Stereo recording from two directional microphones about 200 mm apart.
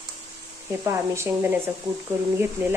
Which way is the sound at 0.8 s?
15° right (ahead or behind).